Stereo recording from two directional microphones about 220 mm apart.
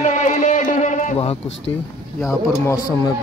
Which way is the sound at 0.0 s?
35° left (ahead or behind).